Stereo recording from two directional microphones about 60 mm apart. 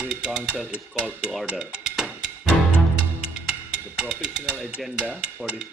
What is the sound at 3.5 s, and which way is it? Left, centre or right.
Music, centre.